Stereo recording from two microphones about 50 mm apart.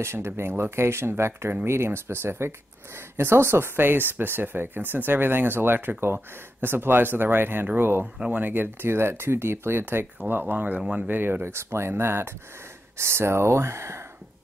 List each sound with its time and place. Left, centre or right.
0.0 s speech: right
8.0 s speech: right
10.8 s speech: centre
11.1 s speech: right
11.4 s speech: right